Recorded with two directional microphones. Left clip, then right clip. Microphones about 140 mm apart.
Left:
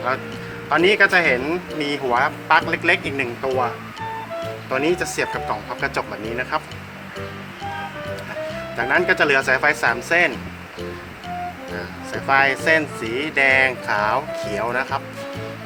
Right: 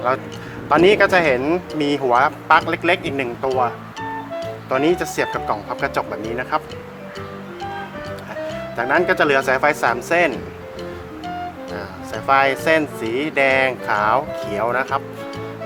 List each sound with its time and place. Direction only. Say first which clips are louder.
0.7 s speech: right 2 dB; 90° right; by 3.2 s 65° right (ahead or behind)
4.7 s a man's voice: right 3 dB; 65° right (ahead or behind)
5.8 s a man's voice: right 2 dB; 55° right (ahead or behind)
8.8 s a man's voice: right 1 dB; 50° right (ahead or behind)
11.8 s a man's voice: even; 65° right (ahead or behind)